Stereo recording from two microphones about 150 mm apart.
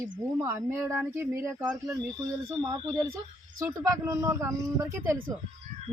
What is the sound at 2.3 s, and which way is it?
Speech, 20° right (ahead or behind).